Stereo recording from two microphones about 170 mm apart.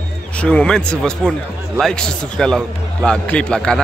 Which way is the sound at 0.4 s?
5° left (ahead or behind).